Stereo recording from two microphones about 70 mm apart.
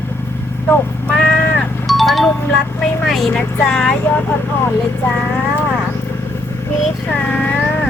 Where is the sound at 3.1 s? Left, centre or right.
Centre.